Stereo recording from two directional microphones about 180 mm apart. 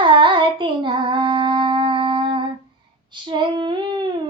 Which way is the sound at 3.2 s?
25° right (ahead or behind).